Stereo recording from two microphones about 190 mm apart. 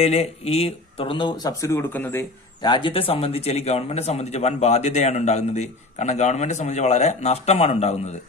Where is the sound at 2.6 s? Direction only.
25° left (ahead or behind).